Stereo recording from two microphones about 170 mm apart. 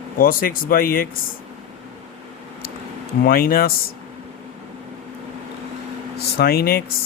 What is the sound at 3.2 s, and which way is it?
Speech, 60° left (ahead or behind).